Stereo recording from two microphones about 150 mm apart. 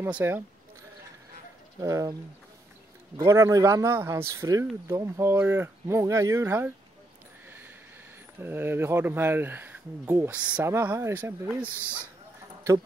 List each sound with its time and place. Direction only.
0.0 s speech: 15° right (ahead or behind)
1.8 s speech: 20° right (ahead or behind)
3.2 s speech: 20° right (ahead or behind)
7.4 s a sound: 15° right (ahead or behind)
8.4 s speech: 15° right (ahead or behind)